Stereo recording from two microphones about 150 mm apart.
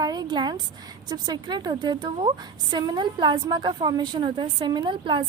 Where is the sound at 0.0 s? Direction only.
25° right (ahead or behind).